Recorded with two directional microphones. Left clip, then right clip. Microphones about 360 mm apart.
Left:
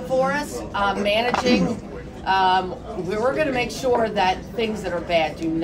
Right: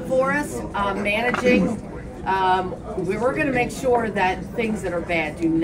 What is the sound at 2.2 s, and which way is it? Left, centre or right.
Speech, centre.